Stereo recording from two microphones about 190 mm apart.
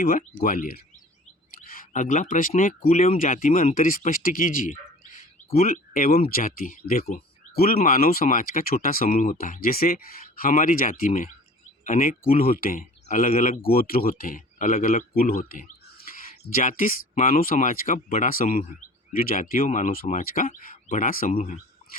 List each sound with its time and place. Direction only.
0.0 s speech: 50° left (ahead or behind)